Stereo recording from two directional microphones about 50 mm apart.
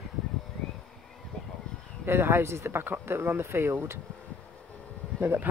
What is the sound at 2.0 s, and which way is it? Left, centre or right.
Speech, right.